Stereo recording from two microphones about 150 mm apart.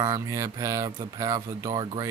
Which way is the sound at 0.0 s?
20° right (ahead or behind).